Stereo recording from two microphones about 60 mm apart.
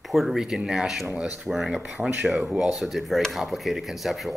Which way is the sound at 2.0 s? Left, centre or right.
Centre.